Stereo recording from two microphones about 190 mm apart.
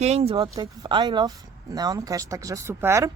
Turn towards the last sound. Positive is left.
turn(degrees=-15)  # may be behind; listen again after turning